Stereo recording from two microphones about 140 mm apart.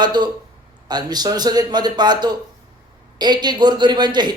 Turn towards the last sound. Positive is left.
turn(degrees=-30)  # may be behind; listen again after turning